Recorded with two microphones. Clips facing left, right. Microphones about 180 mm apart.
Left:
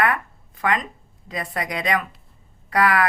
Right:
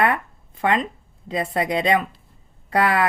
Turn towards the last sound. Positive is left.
turn(degrees=-25)  # may be behind; listen again after turning